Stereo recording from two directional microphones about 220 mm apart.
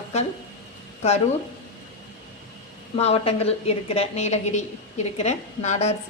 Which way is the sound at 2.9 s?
25° left (ahead or behind).